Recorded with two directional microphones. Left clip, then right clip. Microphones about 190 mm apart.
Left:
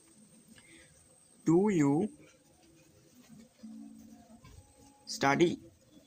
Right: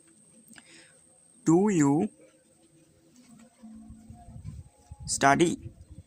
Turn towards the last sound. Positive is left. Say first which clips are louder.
# right 6 dB
turn(degrees=-40)  # may be behind; listen again after turning